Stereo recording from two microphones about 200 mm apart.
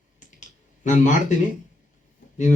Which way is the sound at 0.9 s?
40° left (ahead or behind).